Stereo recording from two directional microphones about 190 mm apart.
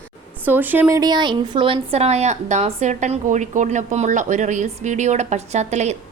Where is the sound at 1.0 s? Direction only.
20° right (ahead or behind).